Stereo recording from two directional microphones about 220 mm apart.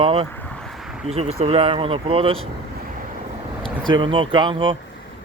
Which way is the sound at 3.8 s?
20° right (ahead or behind).